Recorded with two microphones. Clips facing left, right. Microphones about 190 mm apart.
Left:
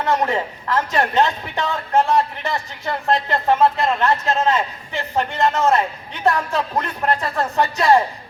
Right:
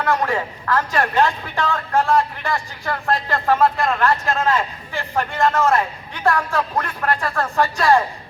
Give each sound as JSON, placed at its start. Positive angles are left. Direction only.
{"t": 0.0, "sound": "a man's voice", "side_deg": 20}